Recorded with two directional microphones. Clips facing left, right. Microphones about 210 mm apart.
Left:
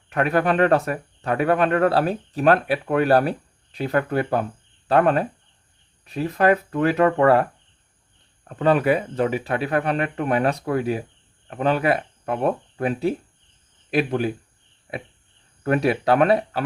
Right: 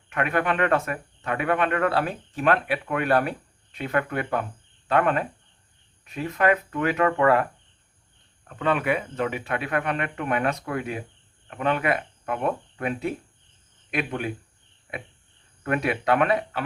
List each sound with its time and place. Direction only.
0.1 s speech: 35° left (ahead or behind)
8.4 s speech: 35° left (ahead or behind)
15.6 s speech: 35° left (ahead or behind)